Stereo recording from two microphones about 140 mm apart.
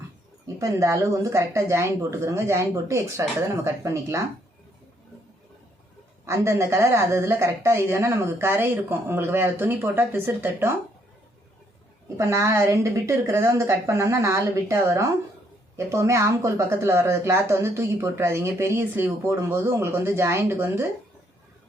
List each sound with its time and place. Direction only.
0.4 s a woman's voice: 20° right (ahead or behind)
6.2 s speech: 20° right (ahead or behind)
12.0 s a woman's voice: 20° right (ahead or behind)